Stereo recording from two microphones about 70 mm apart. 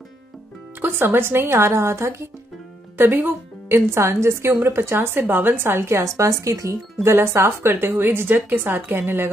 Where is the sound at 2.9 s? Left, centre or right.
Right.